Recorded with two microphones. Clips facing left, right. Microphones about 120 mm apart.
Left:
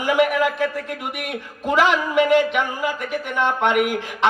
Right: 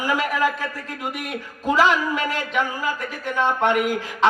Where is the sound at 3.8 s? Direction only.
65° left (ahead or behind).